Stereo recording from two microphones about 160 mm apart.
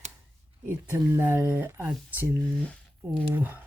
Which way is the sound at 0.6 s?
15° right (ahead or behind).